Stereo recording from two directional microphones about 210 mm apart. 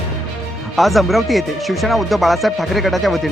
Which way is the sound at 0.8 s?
Centre (ahead or behind).